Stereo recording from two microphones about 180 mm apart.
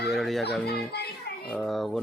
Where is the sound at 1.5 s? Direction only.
Centre (ahead or behind).